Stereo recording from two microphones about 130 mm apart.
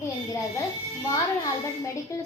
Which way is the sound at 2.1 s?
25° left (ahead or behind).